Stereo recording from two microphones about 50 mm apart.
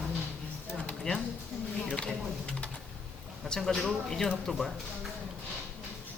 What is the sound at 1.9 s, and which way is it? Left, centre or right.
Speech, left.